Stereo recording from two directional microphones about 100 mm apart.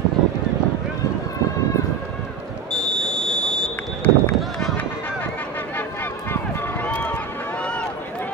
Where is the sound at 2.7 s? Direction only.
5° left (ahead or behind).